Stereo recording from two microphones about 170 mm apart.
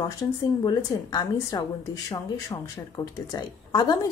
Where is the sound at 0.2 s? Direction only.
20° left (ahead or behind).